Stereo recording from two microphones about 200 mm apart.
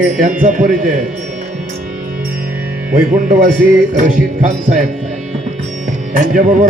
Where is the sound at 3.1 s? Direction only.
40° right (ahead or behind).